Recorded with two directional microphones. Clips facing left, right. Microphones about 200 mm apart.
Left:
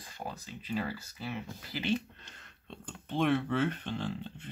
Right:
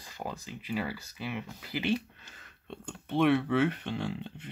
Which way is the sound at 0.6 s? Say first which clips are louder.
Even; 10° right (ahead or behind).